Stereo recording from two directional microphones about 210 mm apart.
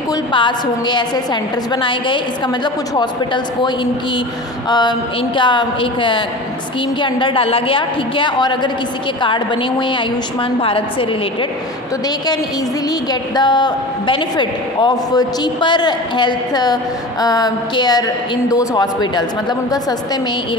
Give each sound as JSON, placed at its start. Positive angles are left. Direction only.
{"t": 0.1, "sound": "a woman's voice", "side_deg": 20}
{"t": 4.6, "sound": "a woman's voice", "side_deg": 20}
{"t": 13.1, "sound": "a woman's voice", "side_deg": 20}